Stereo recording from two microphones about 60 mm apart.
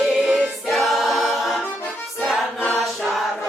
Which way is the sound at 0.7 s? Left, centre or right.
Centre.